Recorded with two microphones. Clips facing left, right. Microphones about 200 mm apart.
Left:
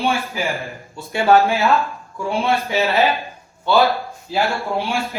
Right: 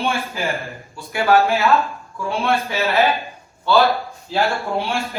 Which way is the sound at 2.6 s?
15° left (ahead or behind).